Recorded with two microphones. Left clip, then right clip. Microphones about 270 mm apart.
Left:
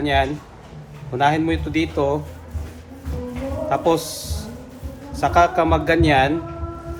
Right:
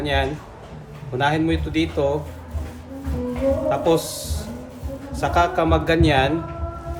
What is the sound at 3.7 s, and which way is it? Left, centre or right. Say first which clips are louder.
A man's voice: even; left.